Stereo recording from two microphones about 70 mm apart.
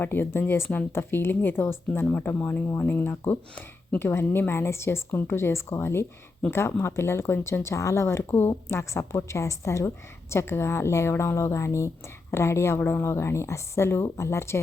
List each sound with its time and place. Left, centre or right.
0.0 s a woman's voice: left